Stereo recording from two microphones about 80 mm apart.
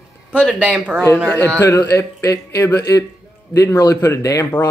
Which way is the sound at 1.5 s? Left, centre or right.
Left.